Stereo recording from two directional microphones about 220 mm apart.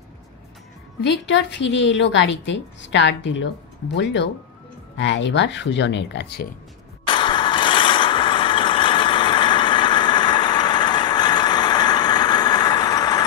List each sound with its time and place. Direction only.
1.2 s a woman's voice: 55° left (ahead or behind)
7.1 s vehicle: 20° left (ahead or behind)